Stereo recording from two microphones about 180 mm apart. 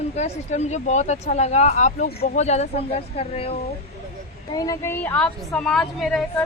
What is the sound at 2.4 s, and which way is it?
Speech, 40° left (ahead or behind).